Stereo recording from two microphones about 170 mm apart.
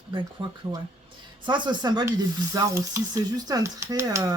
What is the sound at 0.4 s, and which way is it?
Speech, 25° right (ahead or behind).